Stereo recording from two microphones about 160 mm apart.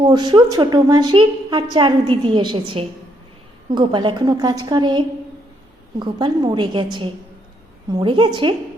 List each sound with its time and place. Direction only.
0.0 s a woman's voice: 25° right (ahead or behind)
7.9 s a woman's voice: 30° right (ahead or behind)